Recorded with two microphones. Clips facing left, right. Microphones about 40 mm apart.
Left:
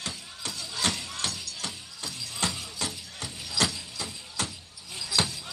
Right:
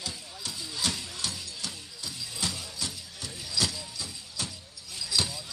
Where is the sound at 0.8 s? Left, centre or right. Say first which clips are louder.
Left 3 dB; left.